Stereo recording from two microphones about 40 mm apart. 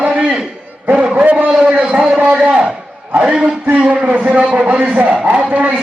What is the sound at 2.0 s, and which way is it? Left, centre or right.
A man's voice, right.